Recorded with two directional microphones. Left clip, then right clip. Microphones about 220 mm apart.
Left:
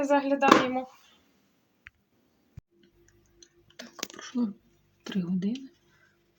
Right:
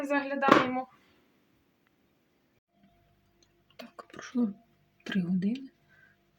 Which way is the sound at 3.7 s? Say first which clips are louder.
Left 5 dB; 5° right (ahead or behind).